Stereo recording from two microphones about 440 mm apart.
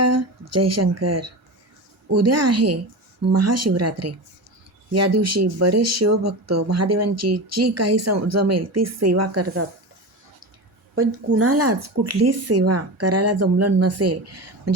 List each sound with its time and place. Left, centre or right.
0.0 s speech: right
10.9 s speech: right